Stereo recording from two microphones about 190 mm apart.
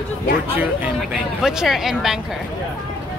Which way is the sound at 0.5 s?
10° right (ahead or behind).